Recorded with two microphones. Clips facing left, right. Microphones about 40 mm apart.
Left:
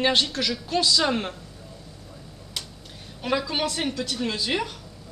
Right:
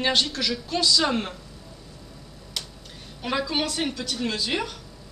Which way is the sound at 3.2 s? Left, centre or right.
Centre.